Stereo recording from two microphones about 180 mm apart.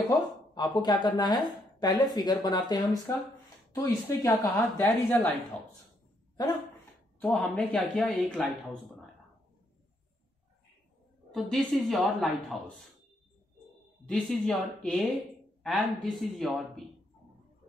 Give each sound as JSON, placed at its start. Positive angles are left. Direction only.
{"t": 0.6, "sound": "speech", "side_deg": 25}
{"t": 6.3, "sound": "speech", "side_deg": 20}
{"t": 7.2, "sound": "a woman's voice", "side_deg": 5}
{"t": 11.3, "sound": "a woman's voice", "side_deg": 0}
{"t": 14.0, "sound": "a woman's voice", "side_deg": 5}